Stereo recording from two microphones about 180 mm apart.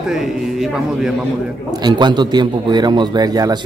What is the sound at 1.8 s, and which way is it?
A man's voice, 25° right (ahead or behind).